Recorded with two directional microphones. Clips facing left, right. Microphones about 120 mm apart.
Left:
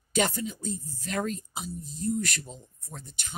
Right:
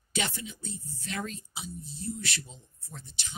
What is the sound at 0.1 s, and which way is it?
Speech, 40° left (ahead or behind).